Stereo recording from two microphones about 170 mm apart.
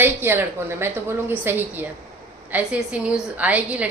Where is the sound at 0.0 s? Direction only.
15° right (ahead or behind).